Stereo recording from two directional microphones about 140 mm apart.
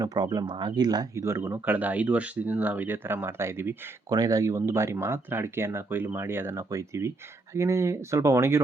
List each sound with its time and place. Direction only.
0.0 s speech: 25° right (ahead or behind)